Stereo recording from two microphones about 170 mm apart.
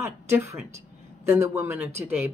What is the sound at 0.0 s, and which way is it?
A woman's voice, 15° right (ahead or behind).